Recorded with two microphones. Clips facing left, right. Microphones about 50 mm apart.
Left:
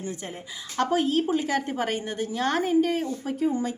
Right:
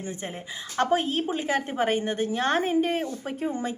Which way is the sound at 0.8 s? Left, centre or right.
Right.